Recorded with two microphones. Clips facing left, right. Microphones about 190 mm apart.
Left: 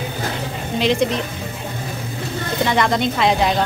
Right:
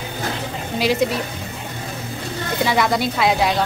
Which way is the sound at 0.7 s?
5° right (ahead or behind).